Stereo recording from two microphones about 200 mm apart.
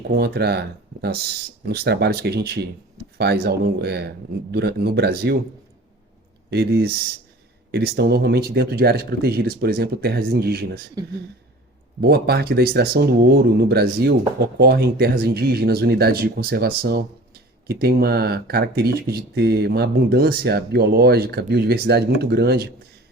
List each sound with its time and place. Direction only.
0.1 s speech: 55° right (ahead or behind)
6.5 s speech: 50° right (ahead or behind)
11.9 s speech: 50° right (ahead or behind)